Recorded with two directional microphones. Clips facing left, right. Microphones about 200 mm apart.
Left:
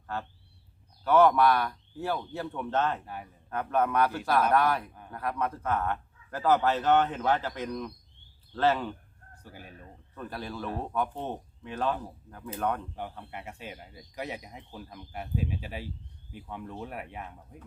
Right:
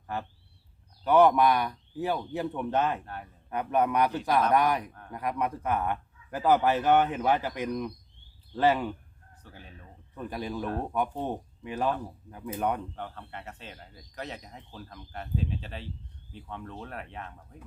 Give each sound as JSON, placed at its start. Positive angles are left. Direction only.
{"t": 0.1, "sound": "a man's voice", "side_deg": -15}
{"t": 9.4, "sound": "speech", "side_deg": 10}
{"t": 10.2, "sound": "a man's voice", "side_deg": -15}
{"t": 13.0, "sound": "speech", "side_deg": 10}